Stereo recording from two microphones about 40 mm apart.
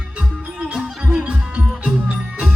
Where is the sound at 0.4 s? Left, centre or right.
Right.